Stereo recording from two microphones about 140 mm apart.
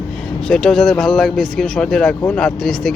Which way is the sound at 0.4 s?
5° left (ahead or behind).